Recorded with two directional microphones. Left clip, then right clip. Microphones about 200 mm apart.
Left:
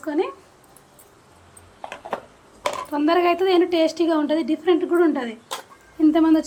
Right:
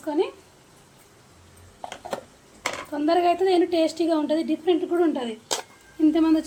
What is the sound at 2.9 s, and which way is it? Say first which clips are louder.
A woman's voice: left 2 dB; 15° left (ahead or behind).